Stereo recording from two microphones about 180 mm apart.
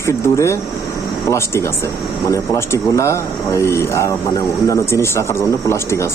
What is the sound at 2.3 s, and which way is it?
Speech, 15° left (ahead or behind).